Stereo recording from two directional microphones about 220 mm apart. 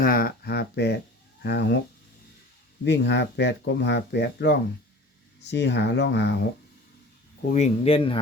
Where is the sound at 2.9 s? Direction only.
50° left (ahead or behind).